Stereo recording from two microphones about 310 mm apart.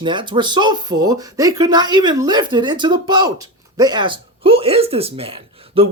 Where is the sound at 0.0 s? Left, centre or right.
Centre.